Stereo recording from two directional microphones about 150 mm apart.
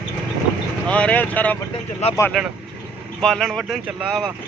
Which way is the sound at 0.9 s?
10° left (ahead or behind).